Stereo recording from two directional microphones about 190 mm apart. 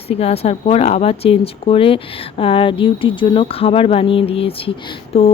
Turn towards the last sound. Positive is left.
turn(degrees=30)  # may be behind; listen again after turning